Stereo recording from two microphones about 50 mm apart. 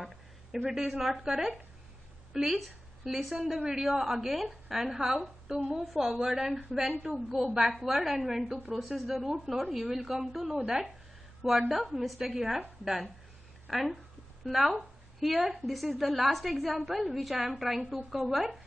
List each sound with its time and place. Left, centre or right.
0.0 s a woman's voice: centre